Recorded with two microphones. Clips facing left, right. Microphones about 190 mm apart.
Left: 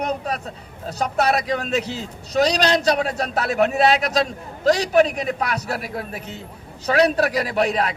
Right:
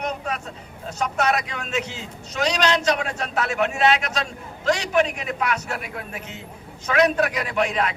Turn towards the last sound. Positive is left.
turn(degrees=35)  # may be behind; listen again after turning